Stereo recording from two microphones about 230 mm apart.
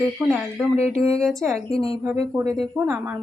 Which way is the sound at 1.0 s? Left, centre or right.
Centre.